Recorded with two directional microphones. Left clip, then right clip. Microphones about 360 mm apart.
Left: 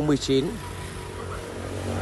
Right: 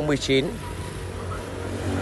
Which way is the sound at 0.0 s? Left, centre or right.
Centre.